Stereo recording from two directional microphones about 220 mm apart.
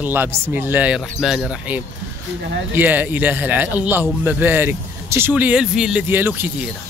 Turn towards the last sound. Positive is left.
turn(degrees=-10)  # may be behind; listen again after turning